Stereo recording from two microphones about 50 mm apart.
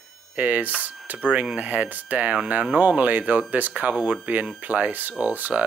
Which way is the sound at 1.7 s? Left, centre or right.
Right.